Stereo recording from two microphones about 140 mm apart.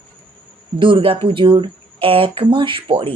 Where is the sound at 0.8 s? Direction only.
40° right (ahead or behind).